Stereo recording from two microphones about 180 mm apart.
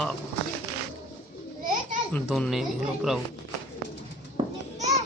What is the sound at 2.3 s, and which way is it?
Speech, centre (ahead or behind).